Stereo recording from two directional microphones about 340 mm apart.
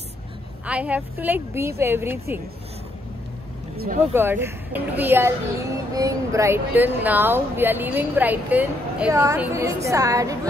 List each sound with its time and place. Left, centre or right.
0.7 s speech: centre
3.7 s speech: right
4.1 s speech: centre